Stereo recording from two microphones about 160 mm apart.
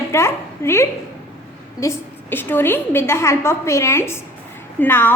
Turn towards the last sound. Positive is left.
turn(degrees=15)  # may be behind; listen again after turning